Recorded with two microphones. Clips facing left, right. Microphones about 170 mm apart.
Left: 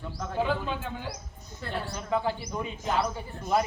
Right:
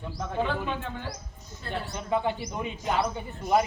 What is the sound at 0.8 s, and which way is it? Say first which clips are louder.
Speech: even; 5° left (ahead or behind).